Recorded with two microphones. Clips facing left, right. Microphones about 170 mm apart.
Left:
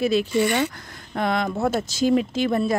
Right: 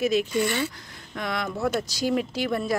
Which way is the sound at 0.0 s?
30° left (ahead or behind).